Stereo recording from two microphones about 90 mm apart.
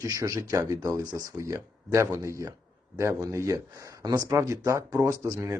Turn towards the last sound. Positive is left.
turn(degrees=-35)  # may be behind; listen again after turning